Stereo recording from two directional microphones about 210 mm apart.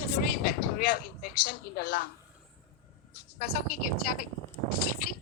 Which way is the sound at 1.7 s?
50° left (ahead or behind).